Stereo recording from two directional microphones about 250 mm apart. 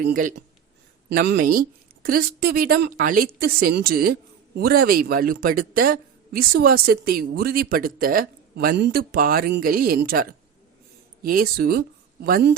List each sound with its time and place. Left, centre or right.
0.0 s speech: right